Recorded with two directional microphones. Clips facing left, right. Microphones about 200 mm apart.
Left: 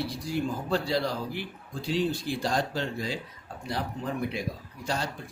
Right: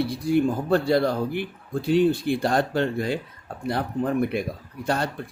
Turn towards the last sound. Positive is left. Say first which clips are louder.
# right 6 dB
turn(degrees=-60)  # may be behind; listen again after turning